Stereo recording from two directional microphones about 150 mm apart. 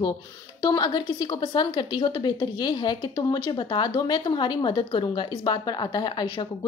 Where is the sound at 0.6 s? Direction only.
25° left (ahead or behind).